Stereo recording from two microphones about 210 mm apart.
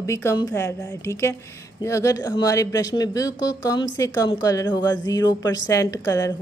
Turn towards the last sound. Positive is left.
turn(degrees=15)  # may be behind; listen again after turning